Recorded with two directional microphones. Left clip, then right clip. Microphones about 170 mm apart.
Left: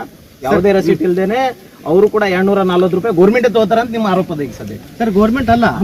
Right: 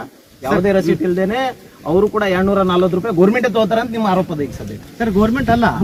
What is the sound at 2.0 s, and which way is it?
Speech, 15° right (ahead or behind).